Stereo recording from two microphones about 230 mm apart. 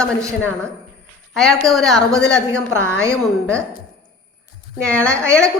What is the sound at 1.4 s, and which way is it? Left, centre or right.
A woman's voice, centre.